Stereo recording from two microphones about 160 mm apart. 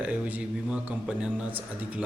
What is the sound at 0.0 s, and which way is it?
Speech, 10° right (ahead or behind).